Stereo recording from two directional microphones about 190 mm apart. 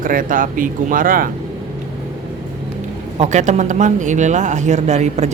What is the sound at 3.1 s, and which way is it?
Speech, 35° right (ahead or behind).